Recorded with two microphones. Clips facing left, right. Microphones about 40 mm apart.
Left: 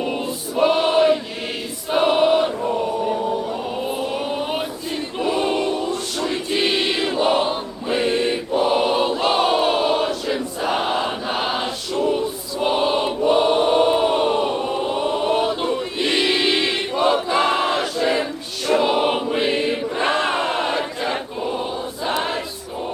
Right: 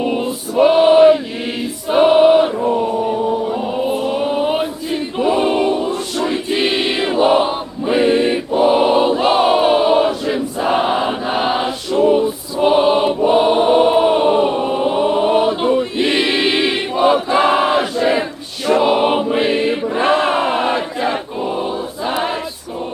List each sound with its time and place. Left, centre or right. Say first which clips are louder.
0.0 s choir: right 5 dB; centre
4.0 s chant: right 7 dB; centre
5.2 s choir: right 5 dB; centre